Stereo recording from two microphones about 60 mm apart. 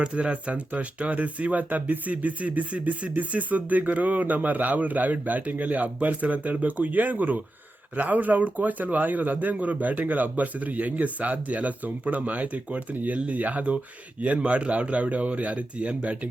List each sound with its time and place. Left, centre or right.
0.0 s speech: centre